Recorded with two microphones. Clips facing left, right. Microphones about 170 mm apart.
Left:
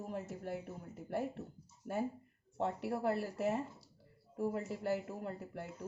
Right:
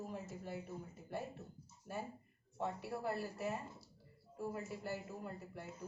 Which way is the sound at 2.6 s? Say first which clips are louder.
Left 5 dB; 70° left (ahead or behind).